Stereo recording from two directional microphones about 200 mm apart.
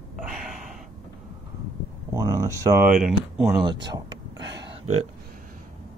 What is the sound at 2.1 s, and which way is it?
Speech, 15° right (ahead or behind).